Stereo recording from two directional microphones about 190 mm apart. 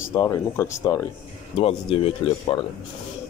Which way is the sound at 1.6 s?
30° left (ahead or behind).